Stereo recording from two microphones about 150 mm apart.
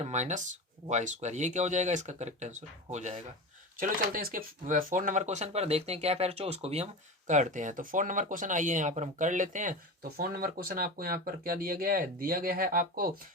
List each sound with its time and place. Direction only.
0.0 s speech: 50° right (ahead or behind)
3.8 s speech: 70° right (ahead or behind)